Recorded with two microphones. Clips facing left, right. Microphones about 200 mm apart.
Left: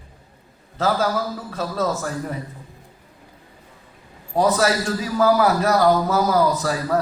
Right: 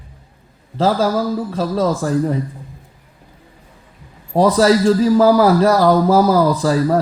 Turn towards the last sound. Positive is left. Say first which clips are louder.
# right 6 dB
turn(degrees=-30)  # may be behind; listen again after turning